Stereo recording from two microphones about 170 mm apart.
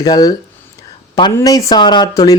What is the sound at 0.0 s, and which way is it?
Speech, 20° left (ahead or behind).